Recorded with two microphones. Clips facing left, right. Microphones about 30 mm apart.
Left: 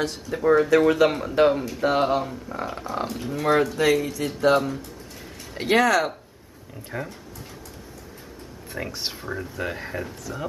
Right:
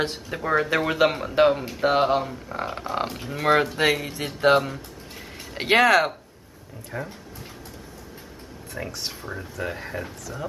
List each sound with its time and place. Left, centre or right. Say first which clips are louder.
0.4 s speech: left 5 dB; centre
3.4 s speech: even; right
6.9 s speech: left 1 dB; centre
8.7 s speech: left 2 dB; centre